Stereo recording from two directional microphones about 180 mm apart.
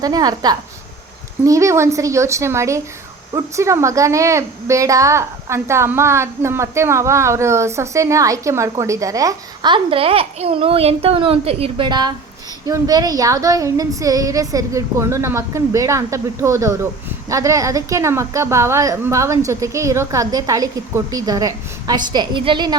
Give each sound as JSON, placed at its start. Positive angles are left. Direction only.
{"t": 0.0, "sound": "a woman's voice", "side_deg": -20}